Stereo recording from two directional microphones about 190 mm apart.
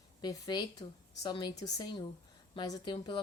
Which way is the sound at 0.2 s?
20° left (ahead or behind).